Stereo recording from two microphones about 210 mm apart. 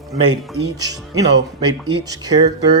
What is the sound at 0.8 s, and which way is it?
Speech, 15° right (ahead or behind).